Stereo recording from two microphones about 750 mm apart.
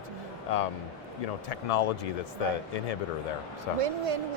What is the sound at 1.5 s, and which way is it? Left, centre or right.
Speech, left.